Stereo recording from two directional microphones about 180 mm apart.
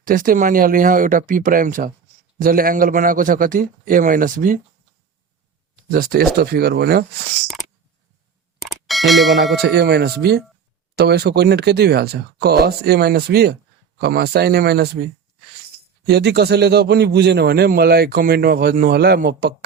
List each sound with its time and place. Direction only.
0.0 s a man's voice: 50° right (ahead or behind)
5.9 s a man's voice: 55° right (ahead or behind)
8.6 s a sound: centre (ahead or behind)
9.6 s a man's voice: 65° right (ahead or behind)
16.0 s a man's voice: 65° right (ahead or behind)